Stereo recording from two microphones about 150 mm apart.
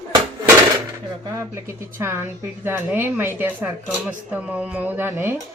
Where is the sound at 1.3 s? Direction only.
15° right (ahead or behind).